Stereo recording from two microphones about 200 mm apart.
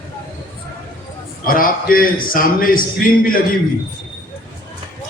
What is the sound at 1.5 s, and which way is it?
A man's voice, 45° left (ahead or behind).